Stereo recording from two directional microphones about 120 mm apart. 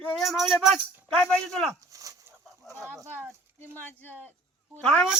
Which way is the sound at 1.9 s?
30° right (ahead or behind).